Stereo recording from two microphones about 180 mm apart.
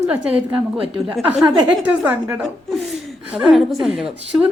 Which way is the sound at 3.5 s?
Centre (ahead or behind).